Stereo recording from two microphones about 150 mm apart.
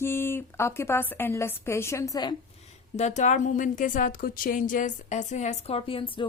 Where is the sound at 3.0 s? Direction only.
50° left (ahead or behind).